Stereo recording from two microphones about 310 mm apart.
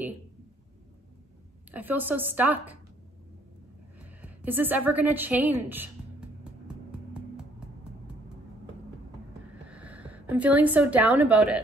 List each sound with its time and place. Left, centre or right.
1.7 s speech: centre
4.0 s a woman's voice: centre
6.9 s music: centre
9.7 s a woman's voice: centre